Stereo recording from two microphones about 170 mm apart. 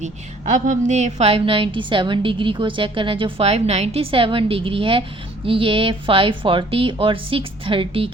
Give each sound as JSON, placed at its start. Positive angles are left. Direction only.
{"t": 0.5, "sound": "a woman's voice", "side_deg": -45}